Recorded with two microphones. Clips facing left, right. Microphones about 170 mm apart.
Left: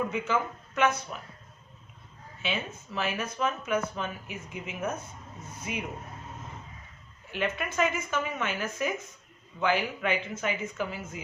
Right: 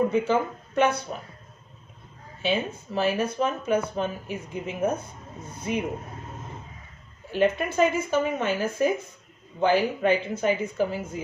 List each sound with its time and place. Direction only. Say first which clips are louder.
0.1 s speech: right 6 dB; 30° right (ahead or behind)
2.4 s speech: right 7 dB; 35° right (ahead or behind)
7.3 s speech: right 8 dB; 35° right (ahead or behind)